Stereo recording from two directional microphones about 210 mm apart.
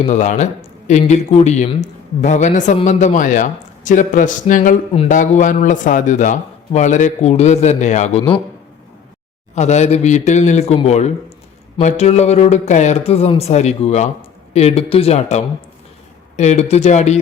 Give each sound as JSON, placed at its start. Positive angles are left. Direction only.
{"t": 0.0, "sound": "speech", "side_deg": 35}
{"t": 9.6, "sound": "speech", "side_deg": 35}